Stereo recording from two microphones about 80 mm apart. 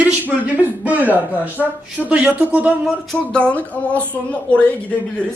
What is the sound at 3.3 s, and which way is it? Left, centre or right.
A man's voice, centre.